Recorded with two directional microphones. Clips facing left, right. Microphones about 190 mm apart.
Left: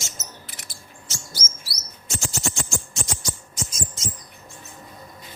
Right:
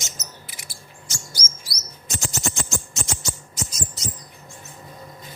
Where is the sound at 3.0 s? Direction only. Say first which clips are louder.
Right 1 dB; 25° right (ahead or behind).